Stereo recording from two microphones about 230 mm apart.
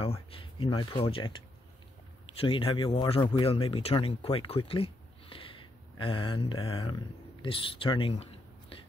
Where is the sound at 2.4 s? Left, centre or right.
Left.